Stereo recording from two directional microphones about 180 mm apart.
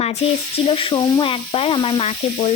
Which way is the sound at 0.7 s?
30° left (ahead or behind).